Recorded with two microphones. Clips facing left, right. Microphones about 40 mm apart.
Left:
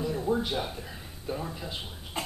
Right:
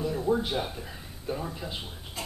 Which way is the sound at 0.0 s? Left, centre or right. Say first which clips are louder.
Right 1 dB; centre.